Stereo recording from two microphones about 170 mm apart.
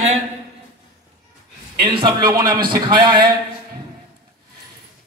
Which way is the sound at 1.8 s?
30° right (ahead or behind).